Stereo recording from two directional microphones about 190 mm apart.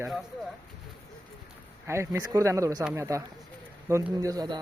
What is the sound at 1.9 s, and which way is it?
A man's voice, 15° right (ahead or behind).